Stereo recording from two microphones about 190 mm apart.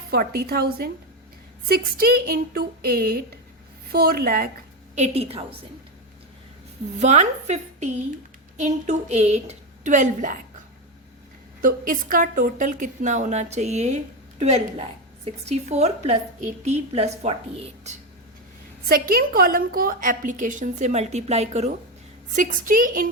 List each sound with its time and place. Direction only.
0.1 s a woman's voice: 55° right (ahead or behind)
4.9 s a woman's voice: 35° right (ahead or behind)
7.0 s a woman's voice: 35° right (ahead or behind)
11.6 s a woman's voice: 45° right (ahead or behind)
18.9 s a woman's voice: 50° right (ahead or behind)